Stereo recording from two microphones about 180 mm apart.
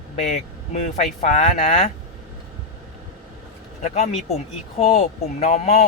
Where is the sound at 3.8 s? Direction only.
40° left (ahead or behind).